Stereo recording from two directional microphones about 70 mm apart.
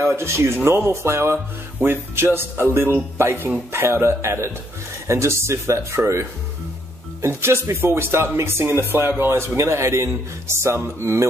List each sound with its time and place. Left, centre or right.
0.0 s speech: right
9.6 s speech: right